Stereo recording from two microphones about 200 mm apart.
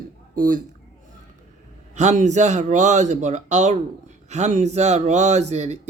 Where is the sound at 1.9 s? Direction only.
35° right (ahead or behind).